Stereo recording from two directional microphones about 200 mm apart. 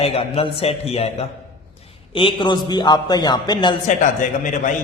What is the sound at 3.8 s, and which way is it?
Speech, 40° left (ahead or behind).